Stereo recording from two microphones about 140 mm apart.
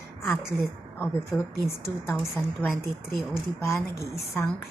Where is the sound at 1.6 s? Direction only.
20° left (ahead or behind).